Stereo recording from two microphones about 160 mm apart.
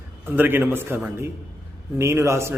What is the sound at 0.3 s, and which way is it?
A man's voice, 10° right (ahead or behind).